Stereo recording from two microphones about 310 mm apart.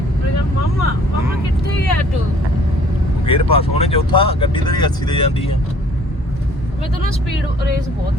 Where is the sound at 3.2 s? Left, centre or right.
Centre.